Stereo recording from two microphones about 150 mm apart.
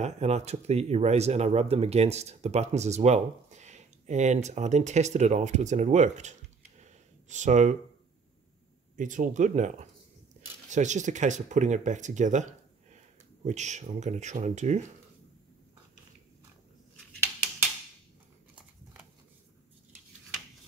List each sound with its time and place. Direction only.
0.0 s speech: 50° right (ahead or behind)
6.8 s a sound: 50° right (ahead or behind)
8.9 s speech: 60° right (ahead or behind)